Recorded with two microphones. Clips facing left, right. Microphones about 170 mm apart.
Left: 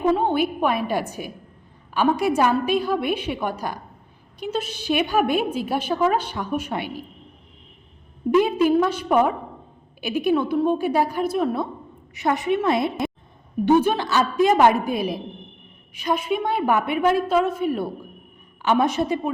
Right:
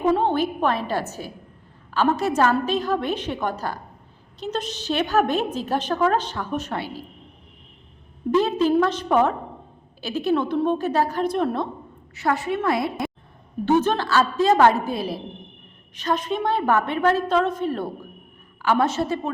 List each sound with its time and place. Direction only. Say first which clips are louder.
0.2 s a woman's voice: even; 10° left (ahead or behind)
8.3 s a woman's voice: left 2 dB; 10° left (ahead or behind)
12.1 s a woman's voice: left 2 dB; 20° left (ahead or behind)